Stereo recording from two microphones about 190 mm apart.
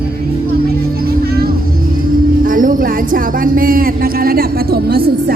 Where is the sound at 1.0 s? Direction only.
55° right (ahead or behind).